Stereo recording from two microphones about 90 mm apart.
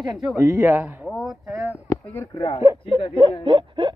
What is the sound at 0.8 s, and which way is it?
Speech, 20° right (ahead or behind).